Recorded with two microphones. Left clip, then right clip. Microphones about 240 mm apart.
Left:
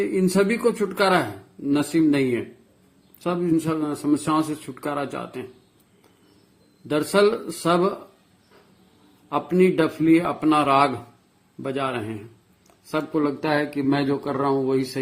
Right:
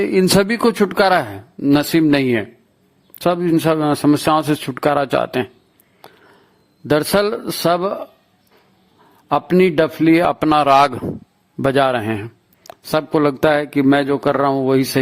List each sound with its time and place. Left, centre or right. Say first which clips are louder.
0.0 s speech: right 6 dB; right
6.8 s speech: right 4 dB; right
9.3 s a man's voice: right 6 dB; right